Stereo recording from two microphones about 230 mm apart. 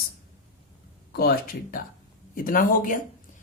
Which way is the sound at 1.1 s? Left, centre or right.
Left.